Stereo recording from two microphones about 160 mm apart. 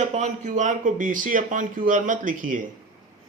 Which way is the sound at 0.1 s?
50° right (ahead or behind).